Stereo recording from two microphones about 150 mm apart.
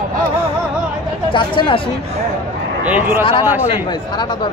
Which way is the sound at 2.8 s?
10° right (ahead or behind).